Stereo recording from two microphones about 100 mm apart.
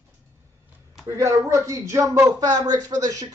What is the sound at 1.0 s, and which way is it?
Speech, 25° right (ahead or behind).